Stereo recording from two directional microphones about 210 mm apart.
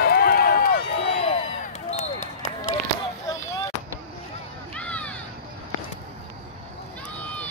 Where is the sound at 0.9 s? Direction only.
30° left (ahead or behind).